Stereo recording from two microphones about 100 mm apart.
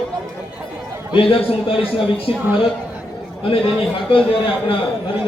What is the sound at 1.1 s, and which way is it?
A man's voice, 60° left (ahead or behind).